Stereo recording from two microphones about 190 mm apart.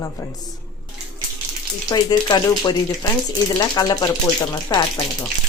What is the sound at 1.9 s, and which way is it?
Speech, 20° left (ahead or behind).